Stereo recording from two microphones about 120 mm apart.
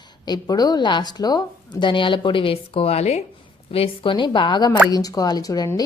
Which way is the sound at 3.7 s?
50° left (ahead or behind).